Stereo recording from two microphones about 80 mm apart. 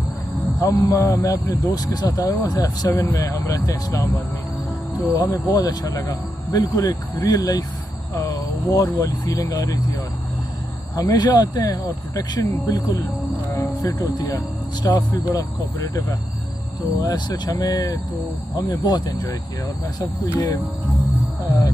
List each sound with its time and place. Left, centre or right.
0.6 s speech: left
8.3 s a sound: left
9.0 s speech: left
11.0 s speech: left
17.0 s speech: left
20.3 s speech: left